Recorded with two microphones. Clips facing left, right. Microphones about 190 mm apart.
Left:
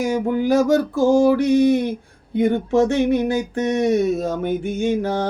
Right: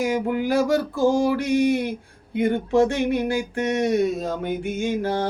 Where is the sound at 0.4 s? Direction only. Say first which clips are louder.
Left 6 dB; 15° left (ahead or behind).